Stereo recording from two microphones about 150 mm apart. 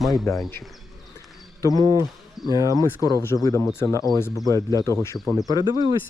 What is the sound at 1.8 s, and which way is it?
Speech, 25° right (ahead or behind).